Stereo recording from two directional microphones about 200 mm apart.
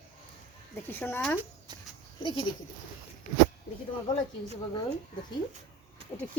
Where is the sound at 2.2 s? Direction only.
25° left (ahead or behind).